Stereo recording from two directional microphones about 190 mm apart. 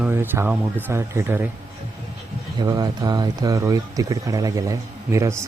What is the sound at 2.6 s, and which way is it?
Speech, 20° right (ahead or behind).